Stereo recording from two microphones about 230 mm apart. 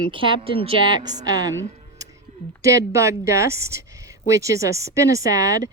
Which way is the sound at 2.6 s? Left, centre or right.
Centre.